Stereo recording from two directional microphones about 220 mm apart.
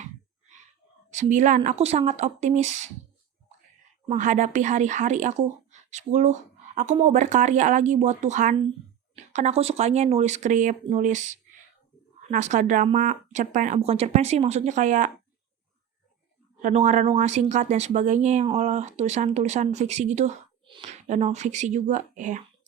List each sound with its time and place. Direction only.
1.1 s speech: 35° right (ahead or behind)
4.0 s speech: 30° right (ahead or behind)
16.6 s speech: 35° right (ahead or behind)